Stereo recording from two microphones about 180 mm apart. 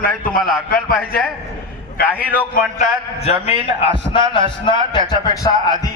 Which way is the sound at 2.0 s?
55° left (ahead or behind).